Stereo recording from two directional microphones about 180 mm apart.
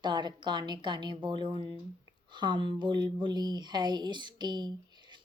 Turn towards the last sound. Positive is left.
turn(degrees=-25)  # may be behind; listen again after turning